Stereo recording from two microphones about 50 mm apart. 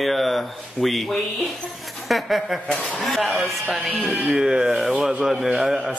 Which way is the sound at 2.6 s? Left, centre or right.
Left.